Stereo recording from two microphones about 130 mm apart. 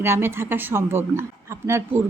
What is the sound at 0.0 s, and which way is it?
Speech, 20° right (ahead or behind).